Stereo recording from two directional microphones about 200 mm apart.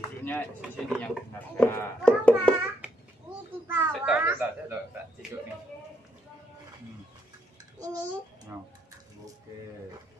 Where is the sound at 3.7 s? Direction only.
10° right (ahead or behind).